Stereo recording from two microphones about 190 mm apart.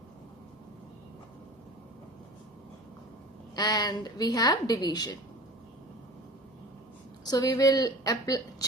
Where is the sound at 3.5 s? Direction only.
20° left (ahead or behind).